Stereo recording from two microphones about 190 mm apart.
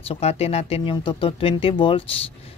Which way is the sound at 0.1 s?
30° left (ahead or behind).